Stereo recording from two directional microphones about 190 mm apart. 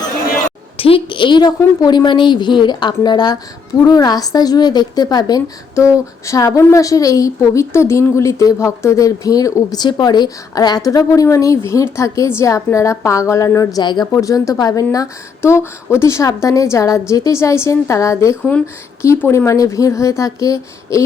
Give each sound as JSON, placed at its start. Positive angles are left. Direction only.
{"t": 0.8, "sound": "a woman's voice", "side_deg": 30}